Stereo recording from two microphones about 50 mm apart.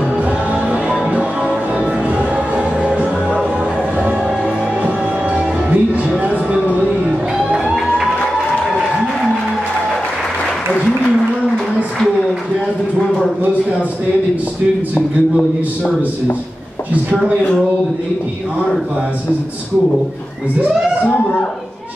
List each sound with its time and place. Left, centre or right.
0.7 s music: right
4.8 s music: right
6.2 s a sound: right
7.1 s music: centre